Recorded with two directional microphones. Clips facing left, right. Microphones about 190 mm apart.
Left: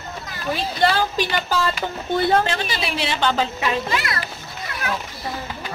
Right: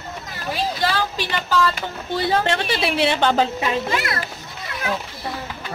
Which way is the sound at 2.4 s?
60° right (ahead or behind).